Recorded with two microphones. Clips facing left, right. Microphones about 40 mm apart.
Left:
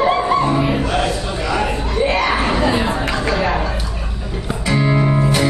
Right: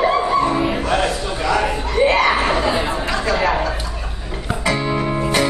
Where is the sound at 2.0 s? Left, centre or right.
Centre.